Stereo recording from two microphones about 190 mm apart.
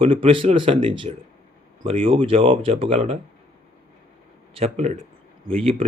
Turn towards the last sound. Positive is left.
turn(degrees=-30)  # may be behind; listen again after turning